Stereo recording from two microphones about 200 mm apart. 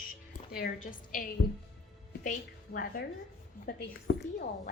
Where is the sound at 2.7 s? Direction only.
45° left (ahead or behind).